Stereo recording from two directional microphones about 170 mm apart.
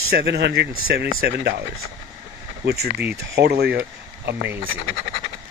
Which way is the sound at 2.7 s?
70° right (ahead or behind).